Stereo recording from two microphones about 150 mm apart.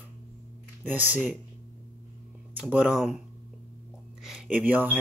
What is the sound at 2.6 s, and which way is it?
Speech, 5° right (ahead or behind).